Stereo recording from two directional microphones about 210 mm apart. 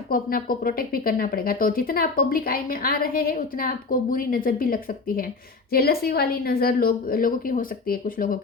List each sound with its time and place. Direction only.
0.1 s speech: 45° left (ahead or behind)